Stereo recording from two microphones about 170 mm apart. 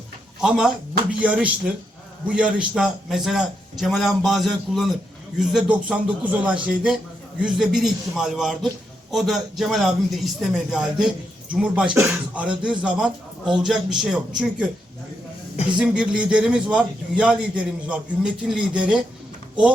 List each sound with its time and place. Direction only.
0.4 s a man's voice: 5° right (ahead or behind)
15.8 s a man's voice: 5° right (ahead or behind)